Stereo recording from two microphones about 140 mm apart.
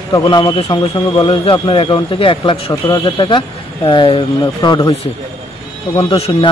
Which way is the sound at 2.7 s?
30° left (ahead or behind).